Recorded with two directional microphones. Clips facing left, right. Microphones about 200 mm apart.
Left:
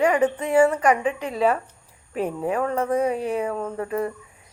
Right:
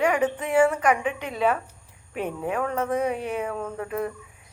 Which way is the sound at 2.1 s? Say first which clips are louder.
Left 4 dB; 35° left (ahead or behind).